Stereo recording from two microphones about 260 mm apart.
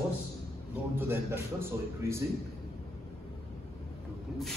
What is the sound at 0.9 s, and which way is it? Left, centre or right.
A man's voice, centre.